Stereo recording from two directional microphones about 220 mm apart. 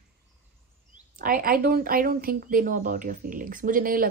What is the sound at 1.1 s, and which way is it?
A woman's voice, 40° right (ahead or behind).